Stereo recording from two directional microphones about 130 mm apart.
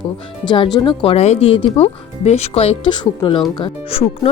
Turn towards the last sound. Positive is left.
turn(degrees=50)  # may be behind; listen again after turning